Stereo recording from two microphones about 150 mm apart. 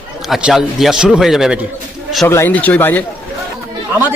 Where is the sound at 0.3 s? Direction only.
Centre (ahead or behind).